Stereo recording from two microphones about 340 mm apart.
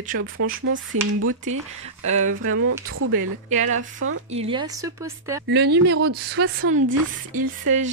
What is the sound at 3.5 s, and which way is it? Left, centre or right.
Speech, right.